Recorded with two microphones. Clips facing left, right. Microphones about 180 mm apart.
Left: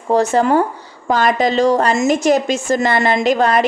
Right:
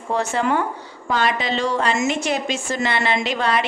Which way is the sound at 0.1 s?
40° left (ahead or behind).